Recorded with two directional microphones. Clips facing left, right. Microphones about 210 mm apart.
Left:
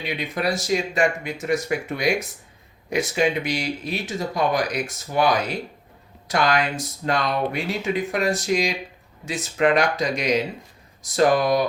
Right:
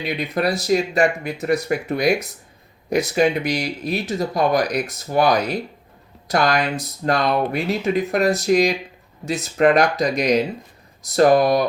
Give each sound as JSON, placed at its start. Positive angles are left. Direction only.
{"t": 0.3, "sound": "speech", "side_deg": -40}